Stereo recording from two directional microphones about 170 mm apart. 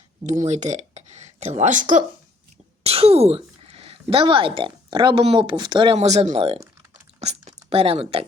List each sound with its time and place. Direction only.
0.3 s speech: 45° right (ahead or behind)
2.8 s speech: 35° right (ahead or behind)